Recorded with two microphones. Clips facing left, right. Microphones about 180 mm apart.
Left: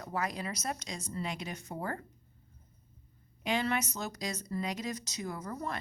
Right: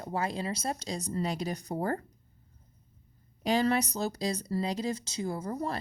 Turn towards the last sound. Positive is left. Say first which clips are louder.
# right 5 dB
turn(degrees=-30)  # may be behind; listen again after turning